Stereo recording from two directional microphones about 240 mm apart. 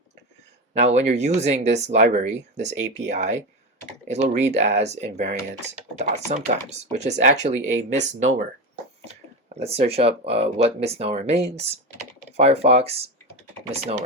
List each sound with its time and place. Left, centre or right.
0.8 s speech: right
9.6 s speech: right